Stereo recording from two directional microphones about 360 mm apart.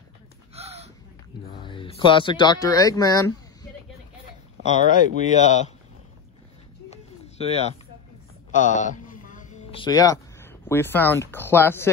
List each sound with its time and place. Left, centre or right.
0.6 s gasp: centre
1.5 s speech: centre
4.6 s speech: centre
7.3 s speech: centre
8.7 s speech: left